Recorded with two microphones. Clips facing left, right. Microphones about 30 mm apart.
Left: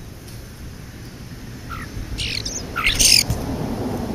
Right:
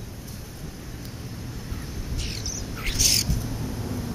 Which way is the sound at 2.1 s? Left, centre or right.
Left.